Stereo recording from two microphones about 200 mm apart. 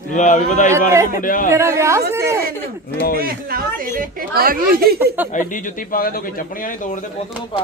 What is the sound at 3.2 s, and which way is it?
A woman's voice, 50° right (ahead or behind).